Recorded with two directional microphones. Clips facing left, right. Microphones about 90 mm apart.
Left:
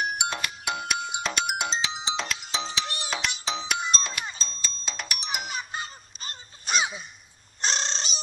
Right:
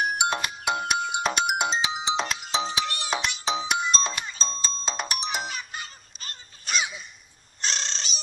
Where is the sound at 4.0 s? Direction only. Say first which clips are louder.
Right 4 dB; 25° right (ahead or behind).